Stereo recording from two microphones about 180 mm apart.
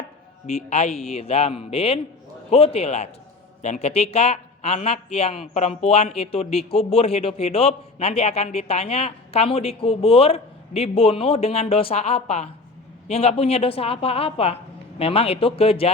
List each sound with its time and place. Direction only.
0.7 s a man's voice: 35° left (ahead or behind)